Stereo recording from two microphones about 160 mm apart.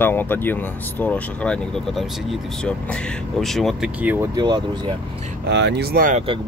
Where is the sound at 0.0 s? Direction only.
10° left (ahead or behind).